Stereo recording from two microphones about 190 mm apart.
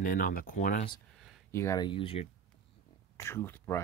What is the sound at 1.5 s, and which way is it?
Speech, 15° left (ahead or behind).